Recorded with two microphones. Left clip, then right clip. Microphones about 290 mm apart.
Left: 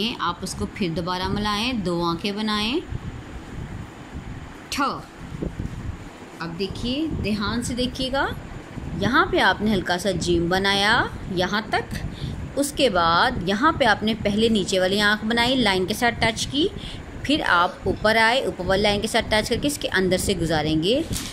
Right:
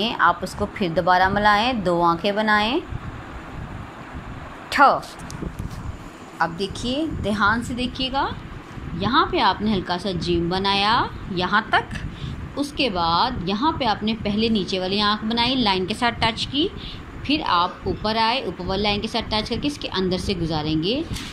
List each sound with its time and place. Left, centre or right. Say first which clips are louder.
0.0 s speech: right 7 dB; centre
4.6 s a sound: right 10 dB; centre
6.4 s a woman's voice: right 5 dB; centre
7.7 s a woman's voice: even; left